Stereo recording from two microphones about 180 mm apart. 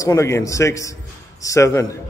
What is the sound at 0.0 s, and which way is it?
A man's voice, 15° left (ahead or behind).